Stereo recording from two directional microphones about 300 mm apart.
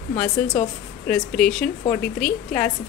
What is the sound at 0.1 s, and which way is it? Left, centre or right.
Speech, left.